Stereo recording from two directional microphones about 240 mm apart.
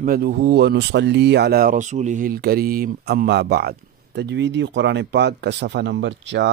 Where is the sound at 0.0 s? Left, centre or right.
Right.